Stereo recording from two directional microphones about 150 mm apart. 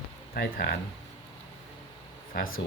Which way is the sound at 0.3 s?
90° left.